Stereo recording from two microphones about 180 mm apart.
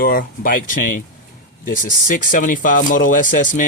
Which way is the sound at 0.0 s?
50° left (ahead or behind).